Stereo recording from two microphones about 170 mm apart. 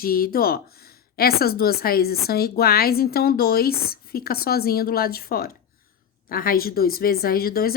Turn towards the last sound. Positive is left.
turn(degrees=60)  # may be behind; listen again after turning